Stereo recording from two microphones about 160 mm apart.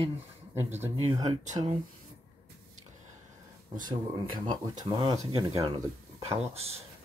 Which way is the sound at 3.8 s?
25° right (ahead or behind).